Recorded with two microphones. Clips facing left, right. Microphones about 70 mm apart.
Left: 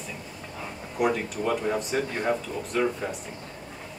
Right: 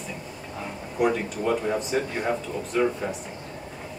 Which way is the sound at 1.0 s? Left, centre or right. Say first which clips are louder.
Right 2 dB; centre.